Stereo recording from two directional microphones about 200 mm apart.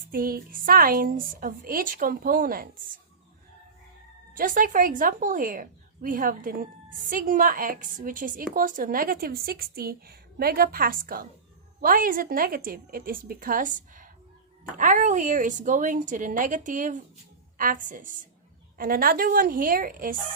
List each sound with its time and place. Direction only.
0.1 s speech: 45° right (ahead or behind)
4.4 s a woman's voice: 40° right (ahead or behind)